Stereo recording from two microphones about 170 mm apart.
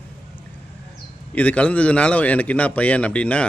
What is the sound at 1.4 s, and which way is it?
A man's voice, 10° left (ahead or behind).